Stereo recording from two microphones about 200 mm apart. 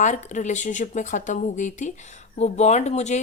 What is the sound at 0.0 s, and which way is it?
A woman's voice, 35° left (ahead or behind).